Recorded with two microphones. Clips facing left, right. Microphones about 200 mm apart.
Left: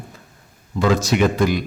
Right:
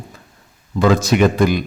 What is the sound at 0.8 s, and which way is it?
Speech, 55° right (ahead or behind).